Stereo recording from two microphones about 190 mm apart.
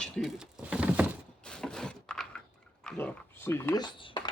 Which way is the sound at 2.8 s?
10° left (ahead or behind).